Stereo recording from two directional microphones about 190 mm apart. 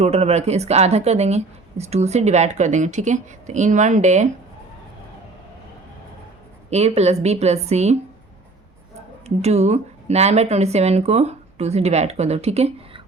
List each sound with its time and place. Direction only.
0.0 s a woman's voice: 35° right (ahead or behind)
6.7 s a woman's voice: 35° right (ahead or behind)
9.2 s a woman's voice: 35° right (ahead or behind)